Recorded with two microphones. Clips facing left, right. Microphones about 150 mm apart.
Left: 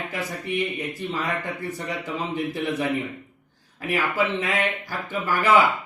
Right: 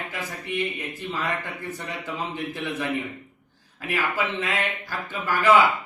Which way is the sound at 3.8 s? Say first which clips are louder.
Left 3 dB; 15° left (ahead or behind).